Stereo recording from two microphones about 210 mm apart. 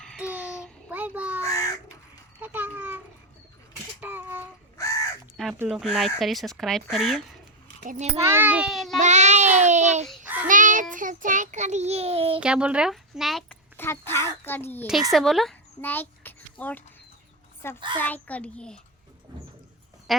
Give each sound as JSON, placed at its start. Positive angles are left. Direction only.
{"t": 0.0, "sound": "a sound", "side_deg": 0}
{"t": 1.4, "sound": "crow", "side_deg": 15}
{"t": 2.4, "sound": "a sound", "side_deg": -10}
{"t": 4.0, "sound": "a sound", "side_deg": -10}
{"t": 5.5, "sound": "speech", "side_deg": -5}
{"t": 7.9, "sound": "child singing", "side_deg": -30}
{"t": 8.2, "sound": "speech", "side_deg": -10}
{"t": 9.0, "sound": "child singing", "side_deg": -35}
{"t": 10.1, "sound": "child singing", "side_deg": -10}
{"t": 10.4, "sound": "child singing", "side_deg": -40}
{"t": 12.4, "sound": "a child's voice", "side_deg": -5}
{"t": 17.9, "sound": "a child's voice", "side_deg": 10}
{"t": 20.1, "sound": "speech", "side_deg": 0}